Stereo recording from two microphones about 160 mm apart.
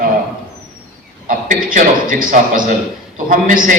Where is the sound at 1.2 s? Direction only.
55° right (ahead or behind).